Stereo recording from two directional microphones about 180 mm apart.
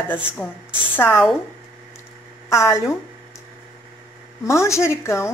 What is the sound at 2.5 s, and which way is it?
Speech, 15° left (ahead or behind).